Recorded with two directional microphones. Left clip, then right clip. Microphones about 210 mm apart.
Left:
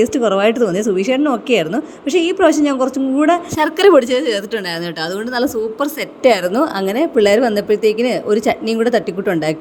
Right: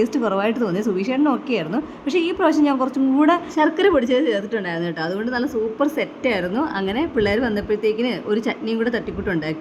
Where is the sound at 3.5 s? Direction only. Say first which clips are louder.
Left 9 dB; 25° left (ahead or behind).